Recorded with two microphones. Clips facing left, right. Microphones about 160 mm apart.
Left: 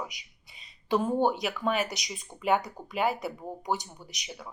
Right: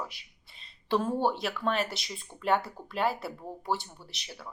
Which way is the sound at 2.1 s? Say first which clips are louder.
Left 1 dB; 15° left (ahead or behind).